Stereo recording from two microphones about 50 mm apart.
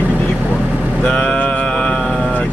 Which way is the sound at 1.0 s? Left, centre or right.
Left.